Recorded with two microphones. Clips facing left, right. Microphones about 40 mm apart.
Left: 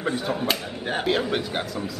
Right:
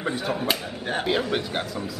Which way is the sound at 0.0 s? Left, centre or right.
Centre.